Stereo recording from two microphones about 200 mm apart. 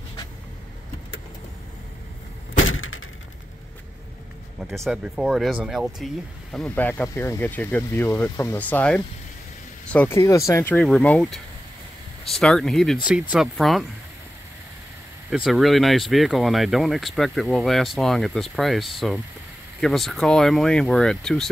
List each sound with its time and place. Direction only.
2.5 s vehicle: 85° left
4.6 s speech: centre (ahead or behind)
15.2 s speech: 5° right (ahead or behind)